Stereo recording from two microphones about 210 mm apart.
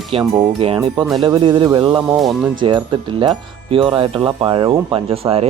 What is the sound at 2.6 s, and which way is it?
Speech, 20° right (ahead or behind).